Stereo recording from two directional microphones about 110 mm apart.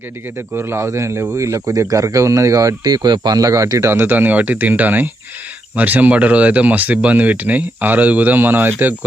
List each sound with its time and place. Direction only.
0.3 s speech: 20° right (ahead or behind)